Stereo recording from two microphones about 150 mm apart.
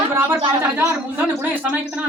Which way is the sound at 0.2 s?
15° right (ahead or behind).